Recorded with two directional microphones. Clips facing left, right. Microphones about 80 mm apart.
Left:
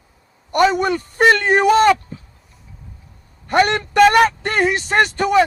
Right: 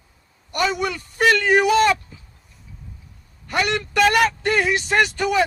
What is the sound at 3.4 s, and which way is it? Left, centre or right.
A man's voice, left.